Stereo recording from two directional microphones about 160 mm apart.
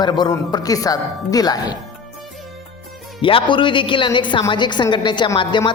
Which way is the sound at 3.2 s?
35° left (ahead or behind).